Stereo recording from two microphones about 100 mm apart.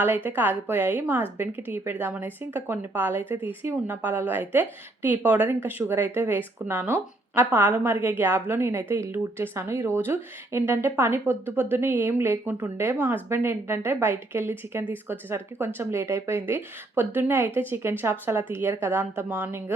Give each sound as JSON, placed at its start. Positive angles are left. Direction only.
{"t": 0.3, "sound": "a woman's voice", "side_deg": -20}